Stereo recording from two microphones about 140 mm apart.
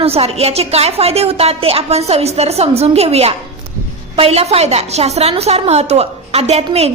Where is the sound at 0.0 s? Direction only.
45° right (ahead or behind).